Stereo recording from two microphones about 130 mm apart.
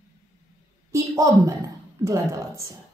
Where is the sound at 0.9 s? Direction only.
25° right (ahead or behind).